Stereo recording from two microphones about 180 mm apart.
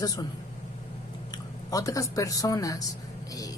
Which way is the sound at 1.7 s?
20° left (ahead or behind).